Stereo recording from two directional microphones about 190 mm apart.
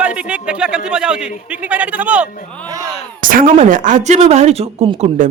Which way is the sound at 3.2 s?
45° right (ahead or behind).